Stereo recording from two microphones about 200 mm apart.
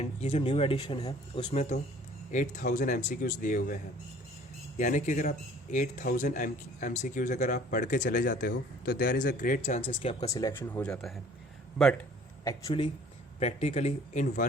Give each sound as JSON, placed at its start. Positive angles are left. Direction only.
{"t": 0.0, "sound": "speech", "side_deg": 30}
{"t": 2.3, "sound": "speech", "side_deg": 40}
{"t": 4.8, "sound": "speech", "side_deg": 40}
{"t": 10.3, "sound": "speech", "side_deg": 15}
{"t": 12.5, "sound": "speech", "side_deg": 20}
{"t": 13.4, "sound": "speech", "side_deg": 35}